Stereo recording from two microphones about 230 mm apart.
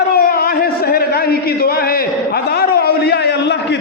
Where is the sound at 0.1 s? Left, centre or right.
Left.